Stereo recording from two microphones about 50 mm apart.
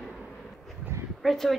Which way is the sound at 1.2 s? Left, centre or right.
Centre.